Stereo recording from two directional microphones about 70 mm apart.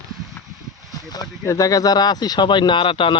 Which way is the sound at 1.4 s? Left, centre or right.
Left.